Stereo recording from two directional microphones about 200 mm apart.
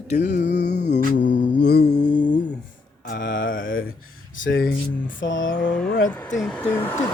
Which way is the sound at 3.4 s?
45° left (ahead or behind).